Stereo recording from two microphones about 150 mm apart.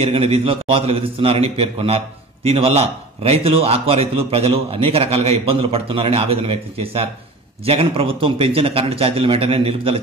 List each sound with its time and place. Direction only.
0.0 s a man's voice: 40° right (ahead or behind)